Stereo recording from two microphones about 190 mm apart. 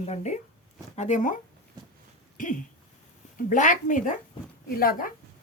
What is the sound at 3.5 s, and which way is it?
Speech, 40° left (ahead or behind).